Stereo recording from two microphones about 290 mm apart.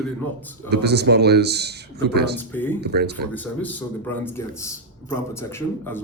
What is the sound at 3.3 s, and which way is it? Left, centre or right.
A man's voice, centre.